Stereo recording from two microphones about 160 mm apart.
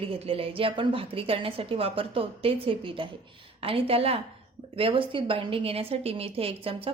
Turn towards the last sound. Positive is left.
turn(degrees=-35)  # may be behind; listen again after turning